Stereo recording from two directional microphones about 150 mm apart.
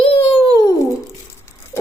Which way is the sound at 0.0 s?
40° left (ahead or behind).